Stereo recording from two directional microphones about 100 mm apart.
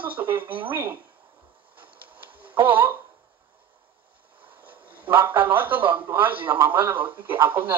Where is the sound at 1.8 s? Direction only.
15° right (ahead or behind).